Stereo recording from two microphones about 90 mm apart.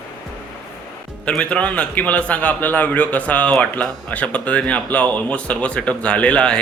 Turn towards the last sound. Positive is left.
turn(degrees=10)  # may be behind; listen again after turning